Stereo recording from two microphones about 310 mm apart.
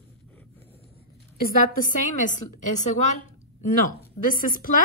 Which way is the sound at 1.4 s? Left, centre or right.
Left.